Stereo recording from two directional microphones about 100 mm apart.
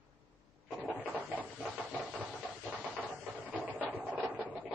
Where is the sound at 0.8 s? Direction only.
15° right (ahead or behind).